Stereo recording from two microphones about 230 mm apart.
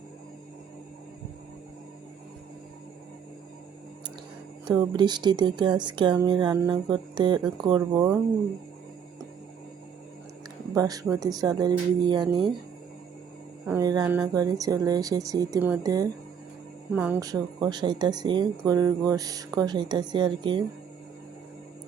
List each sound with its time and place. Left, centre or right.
4.6 s speech: centre
10.8 s speech: centre
13.7 s speech: centre